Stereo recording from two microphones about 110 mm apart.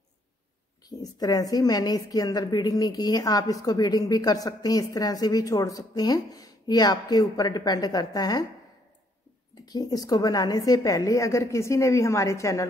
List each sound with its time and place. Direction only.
0.8 s a woman's voice: 35° left (ahead or behind)
9.7 s a woman's voice: 35° left (ahead or behind)